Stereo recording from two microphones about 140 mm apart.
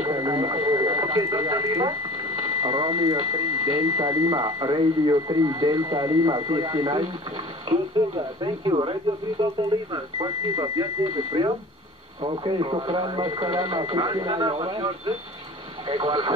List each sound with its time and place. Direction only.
0.0 s speech: 30° right (ahead or behind)
12.2 s speech: 35° right (ahead or behind)